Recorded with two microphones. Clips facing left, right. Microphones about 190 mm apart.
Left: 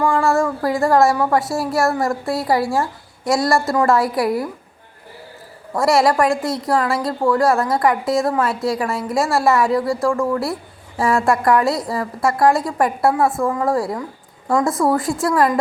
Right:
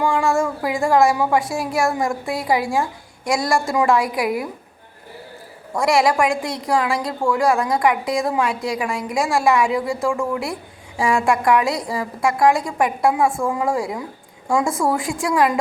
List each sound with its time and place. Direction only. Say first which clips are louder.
0.2 s a woman's voice: left 2 dB; centre (ahead or behind)
5.7 s a woman's voice: left 2 dB; centre (ahead or behind)